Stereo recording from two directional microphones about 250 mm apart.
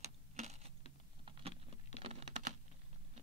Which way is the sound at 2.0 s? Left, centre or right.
Right.